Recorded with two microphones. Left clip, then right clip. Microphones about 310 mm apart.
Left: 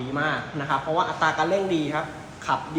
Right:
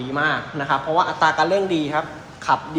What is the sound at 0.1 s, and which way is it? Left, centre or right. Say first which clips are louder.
A man's voice: right 5 dB; centre.